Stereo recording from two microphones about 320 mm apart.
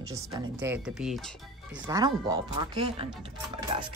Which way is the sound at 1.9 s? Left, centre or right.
Centre.